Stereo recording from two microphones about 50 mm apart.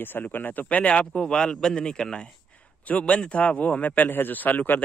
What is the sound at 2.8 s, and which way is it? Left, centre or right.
A man's voice, left.